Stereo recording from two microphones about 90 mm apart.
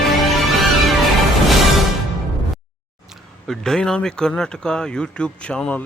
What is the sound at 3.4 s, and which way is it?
Speech, 5° left (ahead or behind).